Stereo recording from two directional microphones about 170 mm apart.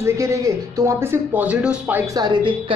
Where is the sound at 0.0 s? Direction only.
15° right (ahead or behind).